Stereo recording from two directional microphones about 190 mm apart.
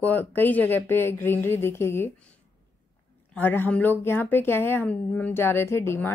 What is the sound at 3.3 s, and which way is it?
A woman's voice, 10° left (ahead or behind).